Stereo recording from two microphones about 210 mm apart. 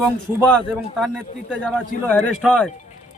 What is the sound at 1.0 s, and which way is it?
Speech, centre (ahead or behind).